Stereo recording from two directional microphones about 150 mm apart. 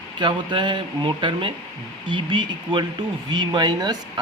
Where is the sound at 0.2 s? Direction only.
30° right (ahead or behind).